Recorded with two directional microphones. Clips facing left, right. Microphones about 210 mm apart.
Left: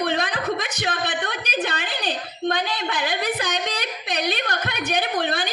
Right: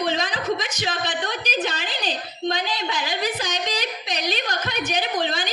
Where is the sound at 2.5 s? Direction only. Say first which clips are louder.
Left 1 dB; 55° left (ahead or behind).